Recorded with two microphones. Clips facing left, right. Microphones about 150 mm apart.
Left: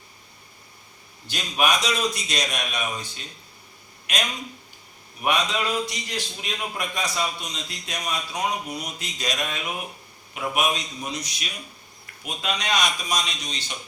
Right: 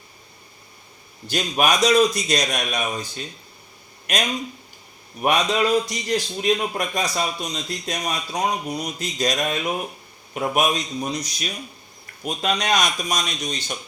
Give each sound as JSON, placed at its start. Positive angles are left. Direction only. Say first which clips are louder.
{"t": 1.3, "sound": "a man's voice", "louder": "right 3 dB", "side_deg": -45}
{"t": 4.1, "sound": "a man's voice", "louder": "right 5 dB", "side_deg": -45}